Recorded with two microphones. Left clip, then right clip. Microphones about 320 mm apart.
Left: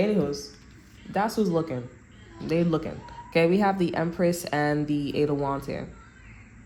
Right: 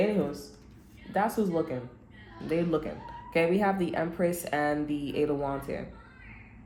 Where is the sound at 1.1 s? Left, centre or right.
Left.